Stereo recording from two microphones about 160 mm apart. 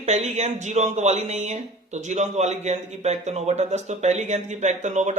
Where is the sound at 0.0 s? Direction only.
45° right (ahead or behind).